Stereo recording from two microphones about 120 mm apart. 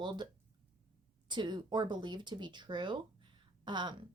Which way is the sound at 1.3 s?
40° right (ahead or behind).